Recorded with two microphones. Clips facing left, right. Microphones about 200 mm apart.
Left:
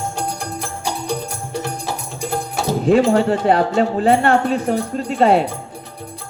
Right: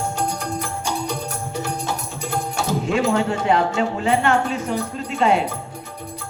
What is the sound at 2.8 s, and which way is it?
Speech, 35° left (ahead or behind).